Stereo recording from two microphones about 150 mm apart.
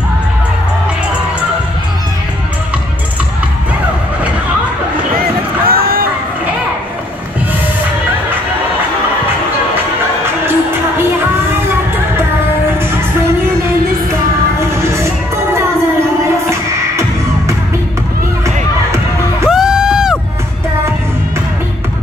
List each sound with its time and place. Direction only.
5.7 s a sound: 80° right
10.4 s music: 15° right (ahead or behind)
19.4 s music: 5° right (ahead or behind)